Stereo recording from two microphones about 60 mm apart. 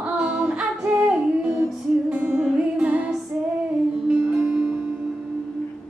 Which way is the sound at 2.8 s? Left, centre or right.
Right.